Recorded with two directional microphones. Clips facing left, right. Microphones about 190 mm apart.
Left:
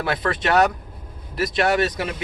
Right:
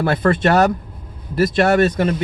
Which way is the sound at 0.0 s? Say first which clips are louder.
Right 7 dB; 50° right (ahead or behind).